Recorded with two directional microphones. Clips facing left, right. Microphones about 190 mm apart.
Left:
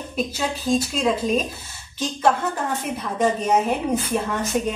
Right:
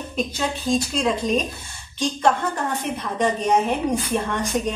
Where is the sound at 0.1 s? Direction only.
5° left (ahead or behind).